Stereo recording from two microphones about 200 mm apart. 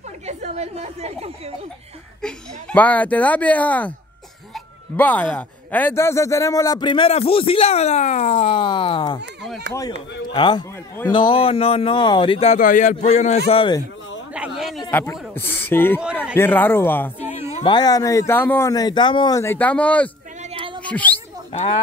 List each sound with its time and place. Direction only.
0.3 s speech: 35° right (ahead or behind)
2.2 s speech: 5° left (ahead or behind)
4.9 s a man's voice: 10° left (ahead or behind); by 9.2 s 25° left (ahead or behind)
10.2 s a man's voice: 20° left (ahead or behind)
12.5 s speech: 40° left (ahead or behind)
13.5 s a man's voice: 25° left (ahead or behind)
14.3 s a sound: 5° right (ahead or behind)
14.9 s speech: 10° left (ahead or behind)
17.2 s speech: 35° left (ahead or behind); by 20.1 s 5° left (ahead or behind)
20.5 s a sound: 25° right (ahead or behind)
20.8 s speech: 10° left (ahead or behind)
21.5 s speech: 30° left (ahead or behind)